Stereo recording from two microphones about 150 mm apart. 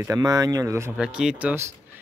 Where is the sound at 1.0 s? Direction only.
5° right (ahead or behind).